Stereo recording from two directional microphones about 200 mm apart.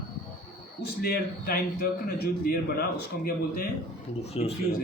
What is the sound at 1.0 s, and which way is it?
A man's voice, 50° left (ahead or behind).